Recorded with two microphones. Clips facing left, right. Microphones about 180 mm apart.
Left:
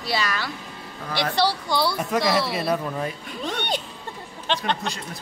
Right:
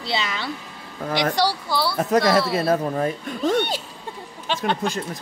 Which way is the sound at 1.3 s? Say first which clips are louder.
Even; 10° right (ahead or behind).